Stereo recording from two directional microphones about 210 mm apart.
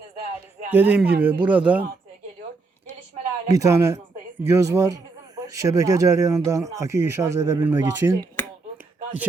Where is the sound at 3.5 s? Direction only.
15° right (ahead or behind).